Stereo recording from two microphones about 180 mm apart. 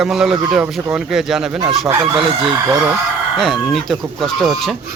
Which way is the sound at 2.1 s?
30° right (ahead or behind).